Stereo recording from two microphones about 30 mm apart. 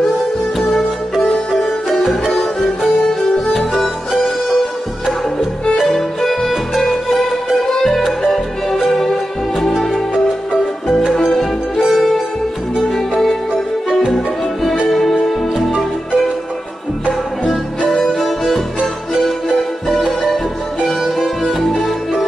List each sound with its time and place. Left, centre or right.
2.3 s music: centre
3.1 s music: centre
5.9 s music: centre
10.1 s music: centre
11.9 s music: centre
14.1 s music: centre
17.5 s music: centre
20.8 s music: centre